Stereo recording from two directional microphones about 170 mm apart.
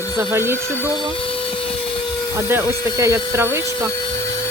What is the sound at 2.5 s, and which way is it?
Speech, 15° right (ahead or behind).